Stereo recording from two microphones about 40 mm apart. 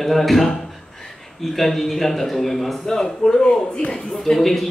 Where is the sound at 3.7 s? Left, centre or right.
Left.